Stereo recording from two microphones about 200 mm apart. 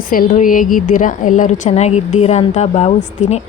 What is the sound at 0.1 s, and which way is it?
Speech, 45° left (ahead or behind).